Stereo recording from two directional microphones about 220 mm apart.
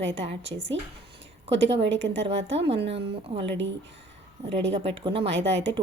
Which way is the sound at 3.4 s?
55° right (ahead or behind).